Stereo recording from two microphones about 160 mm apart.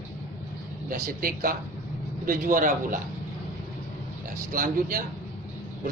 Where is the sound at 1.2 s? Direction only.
65° right (ahead or behind).